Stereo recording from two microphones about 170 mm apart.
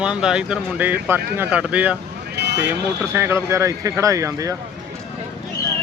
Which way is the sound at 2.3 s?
80° right.